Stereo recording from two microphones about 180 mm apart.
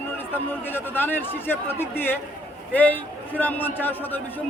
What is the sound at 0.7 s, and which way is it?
Speech, 10° left (ahead or behind).